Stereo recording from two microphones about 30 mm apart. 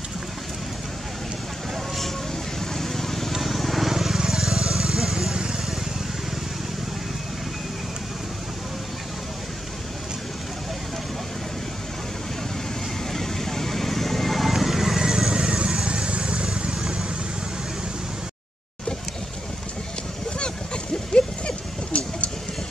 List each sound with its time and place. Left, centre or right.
2.7 s vehicle: centre
5.3 s vehicle: right
13.1 s vehicle: centre
15.0 s neigh: right
15.2 s vehicle: right
20.3 s a sound: left